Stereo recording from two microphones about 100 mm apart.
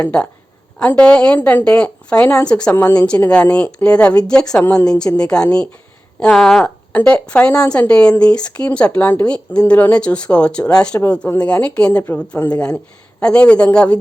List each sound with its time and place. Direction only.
0.0 s speech: 10° left (ahead or behind)
4.6 s a woman's voice: 20° left (ahead or behind)
4.9 s a woman's voice: 10° left (ahead or behind)